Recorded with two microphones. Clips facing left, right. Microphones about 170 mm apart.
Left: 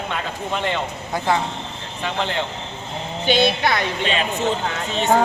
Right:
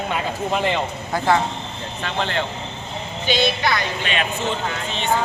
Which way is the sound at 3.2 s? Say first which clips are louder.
Left 3 dB; 60° left (ahead or behind).